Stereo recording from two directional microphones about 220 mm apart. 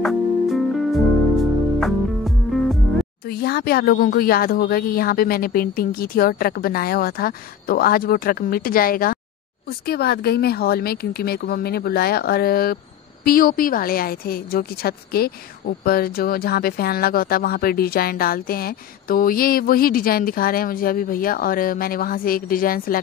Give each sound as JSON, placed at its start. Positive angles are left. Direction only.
{"t": 0.0, "sound": "music", "side_deg": 0}
{"t": 3.3, "sound": "speech", "side_deg": 45}